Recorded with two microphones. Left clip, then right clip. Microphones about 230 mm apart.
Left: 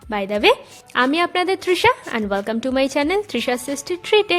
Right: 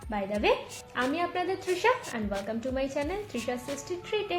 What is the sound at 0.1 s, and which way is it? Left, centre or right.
A woman's voice, left.